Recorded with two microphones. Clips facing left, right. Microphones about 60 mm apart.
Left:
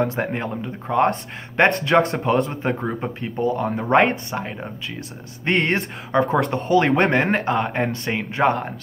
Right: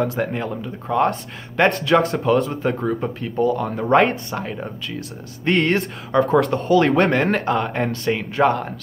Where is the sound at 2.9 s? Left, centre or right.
Left.